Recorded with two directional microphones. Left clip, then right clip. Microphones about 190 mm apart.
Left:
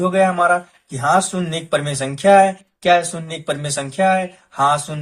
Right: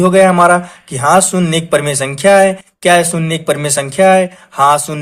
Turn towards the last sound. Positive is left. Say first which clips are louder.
# right 7 dB
turn(degrees=-45)  # may be behind; listen again after turning